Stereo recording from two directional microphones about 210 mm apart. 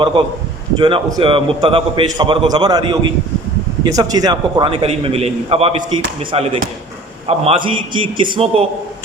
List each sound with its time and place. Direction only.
0.0 s a man's voice: 25° right (ahead or behind)